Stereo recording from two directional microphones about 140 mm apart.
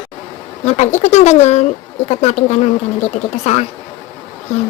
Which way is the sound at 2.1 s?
55° left (ahead or behind).